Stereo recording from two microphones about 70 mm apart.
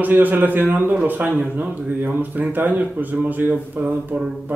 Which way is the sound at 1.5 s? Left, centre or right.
Right.